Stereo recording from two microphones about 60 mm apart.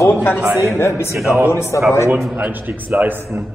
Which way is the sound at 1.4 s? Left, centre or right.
Left.